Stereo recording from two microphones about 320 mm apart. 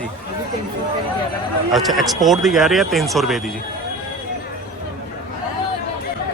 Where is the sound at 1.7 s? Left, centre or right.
Centre.